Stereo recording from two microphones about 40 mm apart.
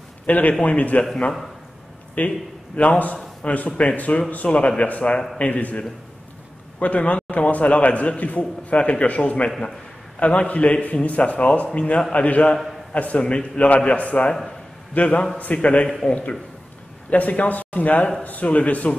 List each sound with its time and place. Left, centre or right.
0.3 s a man's voice: left
2.1 s a man's voice: left
17.1 s a man's voice: left